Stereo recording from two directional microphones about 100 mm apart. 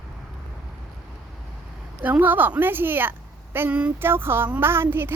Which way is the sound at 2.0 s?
20° right (ahead or behind).